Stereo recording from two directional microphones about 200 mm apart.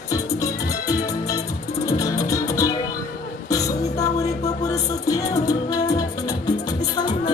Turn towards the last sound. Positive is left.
turn(degrees=20)  # may be behind; listen again after turning